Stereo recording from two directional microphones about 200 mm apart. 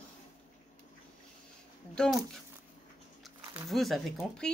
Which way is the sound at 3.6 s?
Centre (ahead or behind).